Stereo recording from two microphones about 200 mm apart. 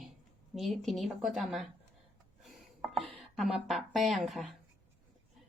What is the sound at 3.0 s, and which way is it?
Speech, centre (ahead or behind).